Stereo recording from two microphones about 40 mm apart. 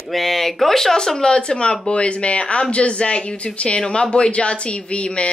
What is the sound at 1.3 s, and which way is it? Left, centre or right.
Speech, left.